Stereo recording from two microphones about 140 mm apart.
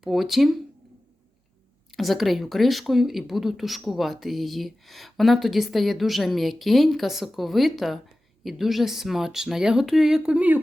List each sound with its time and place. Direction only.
0.0 s speech: centre (ahead or behind)
2.0 s speech: centre (ahead or behind)